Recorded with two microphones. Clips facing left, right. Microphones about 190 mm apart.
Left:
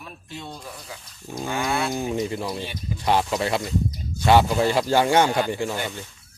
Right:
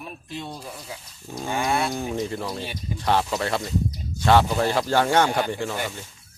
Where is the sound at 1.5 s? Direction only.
20° right (ahead or behind).